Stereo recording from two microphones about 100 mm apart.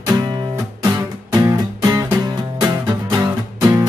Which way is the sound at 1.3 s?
40° right (ahead or behind).